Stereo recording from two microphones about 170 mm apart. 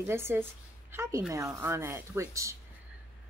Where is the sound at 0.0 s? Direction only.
15° right (ahead or behind).